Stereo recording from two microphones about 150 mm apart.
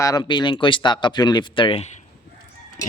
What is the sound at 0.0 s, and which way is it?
A man's voice, 25° left (ahead or behind).